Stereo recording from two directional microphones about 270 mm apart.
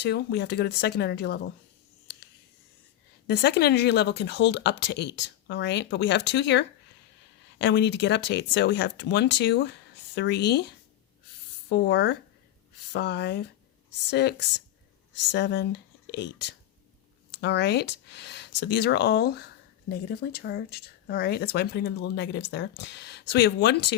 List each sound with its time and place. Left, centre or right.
0.0 s a woman's voice: left
3.2 s a woman's voice: left